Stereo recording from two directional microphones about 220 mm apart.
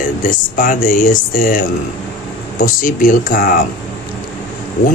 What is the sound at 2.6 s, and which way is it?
Speech, 40° left (ahead or behind).